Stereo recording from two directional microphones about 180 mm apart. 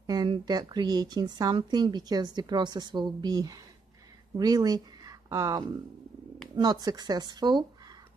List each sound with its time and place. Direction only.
0.0 s a woman's voice: 20° right (ahead or behind)